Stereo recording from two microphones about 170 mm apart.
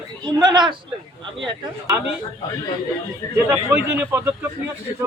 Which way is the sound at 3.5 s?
10° right (ahead or behind).